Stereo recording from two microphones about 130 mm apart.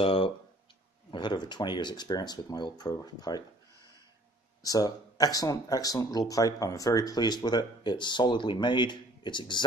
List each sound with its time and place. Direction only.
0.0 s a sound: 45° left (ahead or behind)
1.1 s speech: 35° left (ahead or behind)
4.6 s speech: 30° left (ahead or behind)